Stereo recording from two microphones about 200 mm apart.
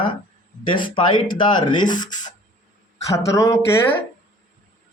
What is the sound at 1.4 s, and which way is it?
A man's voice, 25° left (ahead or behind).